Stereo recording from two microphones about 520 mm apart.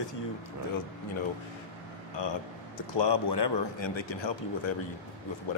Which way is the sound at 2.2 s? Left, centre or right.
Left.